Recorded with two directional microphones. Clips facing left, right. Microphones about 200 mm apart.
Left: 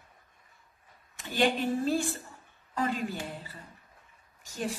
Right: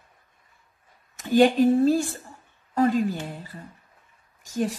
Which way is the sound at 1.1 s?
45° right (ahead or behind).